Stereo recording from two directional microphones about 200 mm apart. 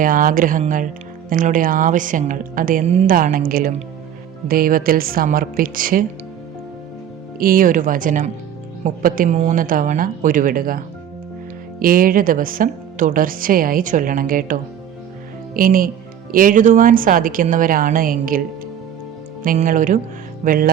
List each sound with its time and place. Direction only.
0.0 s speech: 45° right (ahead or behind)
7.3 s speech: 45° right (ahead or behind)
19.5 s speech: 40° right (ahead or behind)